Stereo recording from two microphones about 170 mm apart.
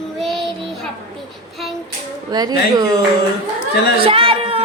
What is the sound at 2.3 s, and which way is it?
Speech, 25° right (ahead or behind).